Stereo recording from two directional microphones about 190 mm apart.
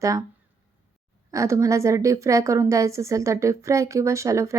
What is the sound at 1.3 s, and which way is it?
A woman's voice, 15° right (ahead or behind).